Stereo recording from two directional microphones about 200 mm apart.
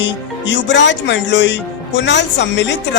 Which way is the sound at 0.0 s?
65° left (ahead or behind).